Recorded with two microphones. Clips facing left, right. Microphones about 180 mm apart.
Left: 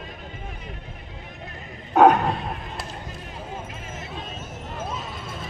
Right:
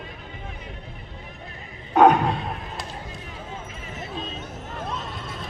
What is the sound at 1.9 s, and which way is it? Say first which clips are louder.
Speech: even; 5° left (ahead or behind).